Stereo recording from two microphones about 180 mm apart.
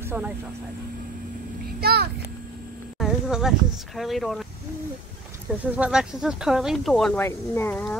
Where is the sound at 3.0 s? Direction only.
Centre (ahead or behind).